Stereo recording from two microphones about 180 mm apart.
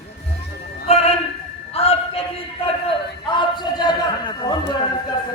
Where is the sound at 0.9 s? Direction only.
35° left (ahead or behind).